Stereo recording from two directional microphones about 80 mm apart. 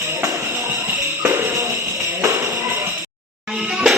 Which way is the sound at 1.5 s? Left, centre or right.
Right.